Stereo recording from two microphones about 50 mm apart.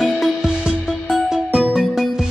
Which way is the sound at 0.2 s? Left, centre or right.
Centre.